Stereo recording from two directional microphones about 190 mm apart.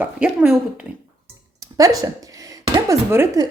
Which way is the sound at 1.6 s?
20° right (ahead or behind).